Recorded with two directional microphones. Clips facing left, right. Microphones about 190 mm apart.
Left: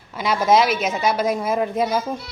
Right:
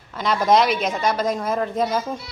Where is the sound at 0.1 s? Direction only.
10° left (ahead or behind).